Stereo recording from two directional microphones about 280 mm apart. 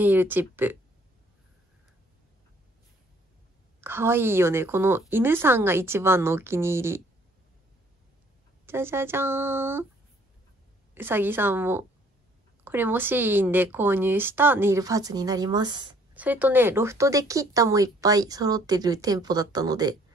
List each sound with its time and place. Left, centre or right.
0.0 s speech: centre
3.8 s speech: centre
8.6 s speech: centre
11.0 s speech: centre